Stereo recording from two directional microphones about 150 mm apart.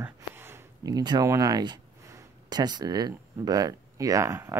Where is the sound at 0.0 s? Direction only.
15° right (ahead or behind).